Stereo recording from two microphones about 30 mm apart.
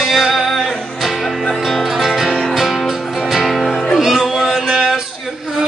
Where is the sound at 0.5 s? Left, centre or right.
Centre.